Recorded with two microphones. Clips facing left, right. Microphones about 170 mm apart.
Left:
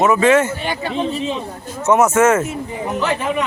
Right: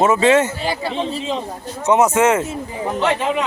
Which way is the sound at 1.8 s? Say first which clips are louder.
Left 1 dB; 15° right (ahead or behind).